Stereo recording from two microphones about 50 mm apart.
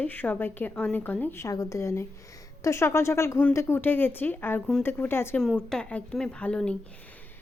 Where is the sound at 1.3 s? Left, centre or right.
Left.